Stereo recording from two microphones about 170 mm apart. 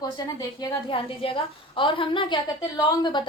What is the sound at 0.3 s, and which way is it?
A woman's voice, 25° left (ahead or behind).